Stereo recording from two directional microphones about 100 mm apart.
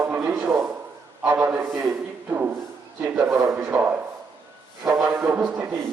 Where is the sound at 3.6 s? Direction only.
20° right (ahead or behind).